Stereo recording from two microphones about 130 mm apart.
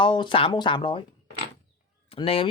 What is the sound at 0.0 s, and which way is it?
Speech, 35° left (ahead or behind).